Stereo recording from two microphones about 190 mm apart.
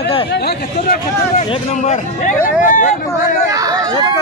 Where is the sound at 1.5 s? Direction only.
40° left (ahead or behind).